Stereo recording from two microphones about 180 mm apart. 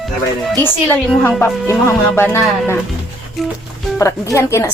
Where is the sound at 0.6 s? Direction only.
10° left (ahead or behind).